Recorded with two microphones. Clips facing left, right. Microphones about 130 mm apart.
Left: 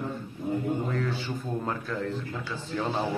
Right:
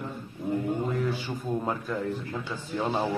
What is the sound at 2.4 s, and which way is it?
Speech, 15° right (ahead or behind).